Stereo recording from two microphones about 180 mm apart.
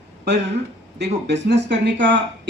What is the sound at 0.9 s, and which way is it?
Speech, 70° right (ahead or behind).